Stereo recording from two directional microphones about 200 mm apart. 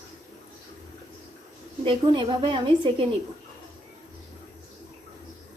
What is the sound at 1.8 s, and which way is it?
A woman's voice, 25° right (ahead or behind).